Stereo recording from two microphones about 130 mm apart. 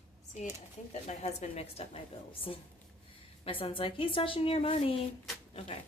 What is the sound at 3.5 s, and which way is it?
A woman's voice, 45° left (ahead or behind).